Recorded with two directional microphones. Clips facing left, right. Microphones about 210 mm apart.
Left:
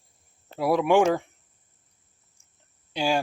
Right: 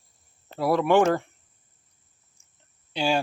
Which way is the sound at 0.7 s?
10° left (ahead or behind).